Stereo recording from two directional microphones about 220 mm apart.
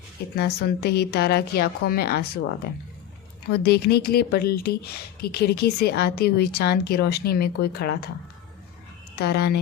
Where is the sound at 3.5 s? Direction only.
50° left (ahead or behind).